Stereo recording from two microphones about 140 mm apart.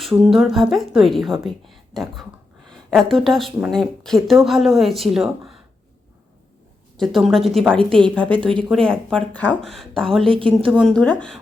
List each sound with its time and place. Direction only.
0.0 s a woman's voice: centre (ahead or behind)
6.9 s a woman's voice: centre (ahead or behind)
10.3 s a woman's voice: 40° right (ahead or behind)
10.8 s a woman's voice: 10° left (ahead or behind)